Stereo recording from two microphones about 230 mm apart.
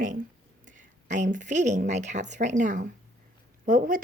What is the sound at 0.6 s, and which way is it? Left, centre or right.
A woman's voice, right.